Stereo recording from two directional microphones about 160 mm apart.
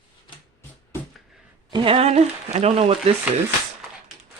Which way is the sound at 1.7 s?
35° right (ahead or behind).